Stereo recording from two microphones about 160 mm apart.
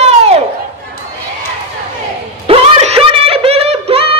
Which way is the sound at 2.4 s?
35° right (ahead or behind).